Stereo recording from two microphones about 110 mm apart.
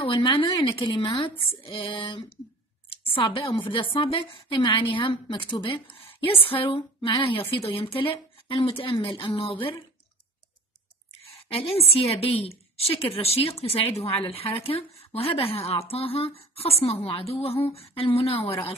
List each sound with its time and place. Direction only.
0.0 s a woman's voice: 45° left (ahead or behind)
11.2 s a woman's voice: 60° left (ahead or behind)